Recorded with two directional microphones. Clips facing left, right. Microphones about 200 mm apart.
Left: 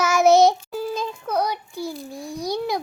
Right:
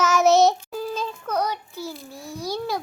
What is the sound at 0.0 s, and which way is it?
Child singing, 10° left (ahead or behind).